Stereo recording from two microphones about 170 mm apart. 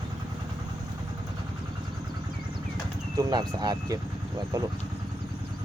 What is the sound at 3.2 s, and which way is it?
Speech, 25° right (ahead or behind).